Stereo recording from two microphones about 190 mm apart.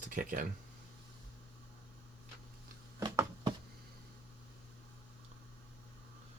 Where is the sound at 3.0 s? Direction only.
20° right (ahead or behind).